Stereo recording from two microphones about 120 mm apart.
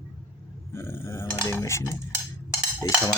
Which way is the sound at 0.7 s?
20° left (ahead or behind).